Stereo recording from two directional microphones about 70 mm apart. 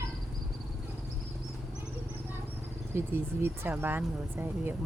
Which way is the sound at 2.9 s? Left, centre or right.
Right.